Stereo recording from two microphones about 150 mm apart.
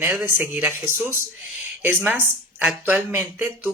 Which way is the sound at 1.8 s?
10° right (ahead or behind).